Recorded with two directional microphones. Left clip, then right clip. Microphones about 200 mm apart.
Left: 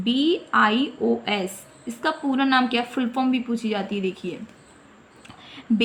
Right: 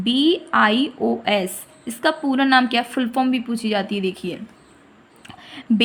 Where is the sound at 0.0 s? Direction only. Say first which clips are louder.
Right 4 dB; 40° right (ahead or behind).